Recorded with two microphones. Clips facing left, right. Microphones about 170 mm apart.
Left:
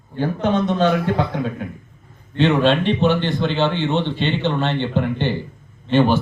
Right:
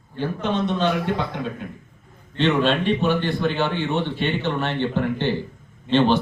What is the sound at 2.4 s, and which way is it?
A man's voice, 35° left (ahead or behind).